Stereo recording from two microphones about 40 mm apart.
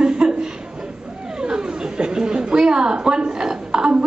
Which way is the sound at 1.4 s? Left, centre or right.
Right.